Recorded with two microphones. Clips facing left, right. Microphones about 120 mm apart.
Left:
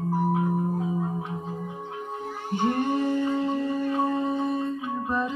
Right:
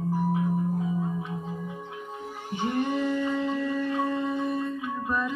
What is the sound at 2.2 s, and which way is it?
Music, 55° left (ahead or behind).